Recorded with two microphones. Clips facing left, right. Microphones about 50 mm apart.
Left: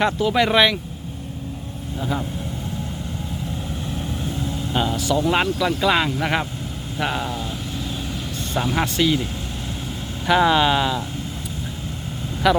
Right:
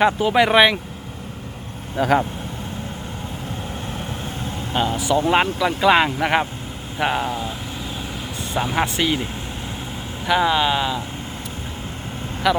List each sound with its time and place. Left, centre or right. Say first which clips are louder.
0.0 s speech: right 3 dB; centre
2.0 s speech: right 9 dB; right
3.9 s vehicle: left 2 dB; right
4.7 s speech: right 2 dB; centre
8.5 s speech: even; centre
10.2 s speech: left 2 dB; centre
12.4 s speech: left 1 dB; centre